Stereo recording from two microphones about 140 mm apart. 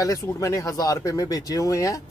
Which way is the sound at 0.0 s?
25° left (ahead or behind).